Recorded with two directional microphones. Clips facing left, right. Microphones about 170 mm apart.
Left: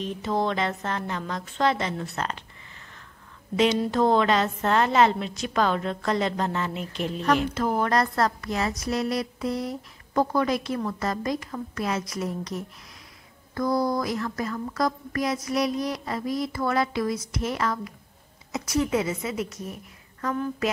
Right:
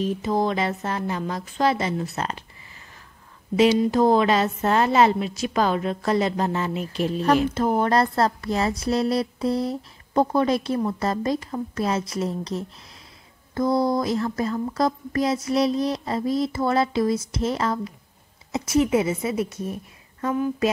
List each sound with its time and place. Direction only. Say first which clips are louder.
0.0 s speech: right 4 dB; centre (ahead or behind)
2.1 s speech: right 2 dB; 20° right (ahead or behind)
3.5 s a woman's voice: right 4 dB; 10° right (ahead or behind); by 20.3 s 25° right (ahead or behind)
20.3 s speech: right 7 dB; 15° right (ahead or behind)